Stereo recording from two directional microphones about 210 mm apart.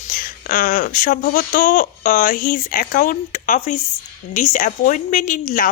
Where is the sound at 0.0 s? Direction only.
40° left (ahead or behind).